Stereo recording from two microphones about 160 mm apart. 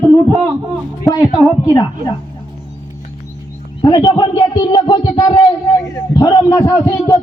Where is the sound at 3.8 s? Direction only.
25° left (ahead or behind).